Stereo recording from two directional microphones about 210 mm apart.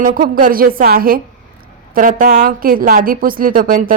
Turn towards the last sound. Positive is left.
turn(degrees=-40)  # may be behind; listen again after turning